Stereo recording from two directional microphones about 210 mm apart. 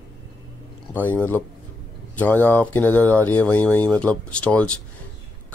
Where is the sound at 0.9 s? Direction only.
10° left (ahead or behind).